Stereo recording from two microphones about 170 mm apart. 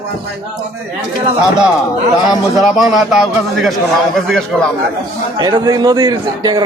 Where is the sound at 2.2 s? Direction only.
Centre (ahead or behind).